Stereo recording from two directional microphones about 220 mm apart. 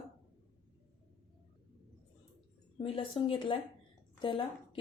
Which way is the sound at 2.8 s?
25° left (ahead or behind).